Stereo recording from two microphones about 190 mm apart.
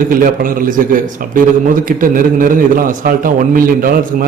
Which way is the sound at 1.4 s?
45° right (ahead or behind).